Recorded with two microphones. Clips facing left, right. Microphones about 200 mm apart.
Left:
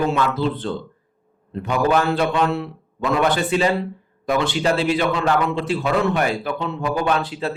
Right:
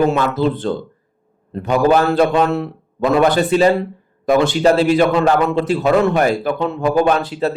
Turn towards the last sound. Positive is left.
turn(degrees=-40)  # may be behind; listen again after turning